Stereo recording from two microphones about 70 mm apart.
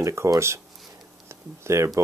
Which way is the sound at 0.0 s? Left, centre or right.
Right.